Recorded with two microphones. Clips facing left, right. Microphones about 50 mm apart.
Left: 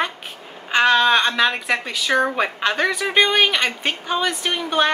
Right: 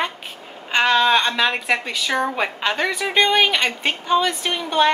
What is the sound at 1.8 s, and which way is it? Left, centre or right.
A woman's voice, centre.